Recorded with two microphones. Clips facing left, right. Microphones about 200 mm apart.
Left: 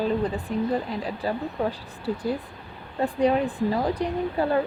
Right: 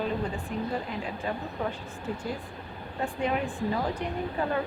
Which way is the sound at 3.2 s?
35° left (ahead or behind).